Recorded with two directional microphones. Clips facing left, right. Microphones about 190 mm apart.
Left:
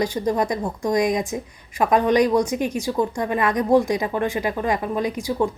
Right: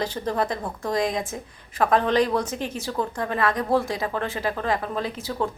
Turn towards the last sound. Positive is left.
turn(degrees=15)  # may be behind; listen again after turning